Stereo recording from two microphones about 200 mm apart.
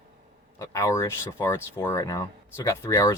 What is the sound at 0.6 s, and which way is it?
Speech, 15° left (ahead or behind).